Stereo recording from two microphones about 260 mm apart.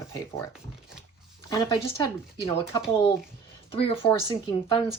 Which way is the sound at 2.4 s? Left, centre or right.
Centre.